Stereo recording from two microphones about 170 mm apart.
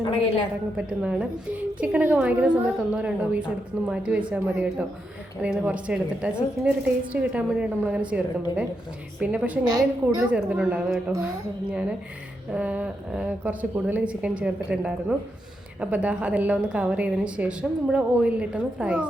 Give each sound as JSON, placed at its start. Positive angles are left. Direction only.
{"t": 0.0, "sound": "a woman's voice", "side_deg": 30}
{"t": 0.8, "sound": "a woman's voice", "side_deg": -5}